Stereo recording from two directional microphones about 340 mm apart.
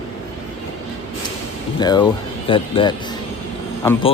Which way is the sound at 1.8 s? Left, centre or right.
Centre.